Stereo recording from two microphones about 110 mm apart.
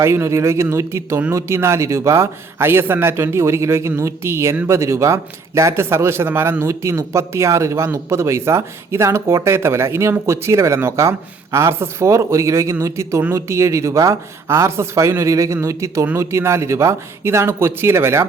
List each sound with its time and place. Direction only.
0.0 s speech: 25° right (ahead or behind)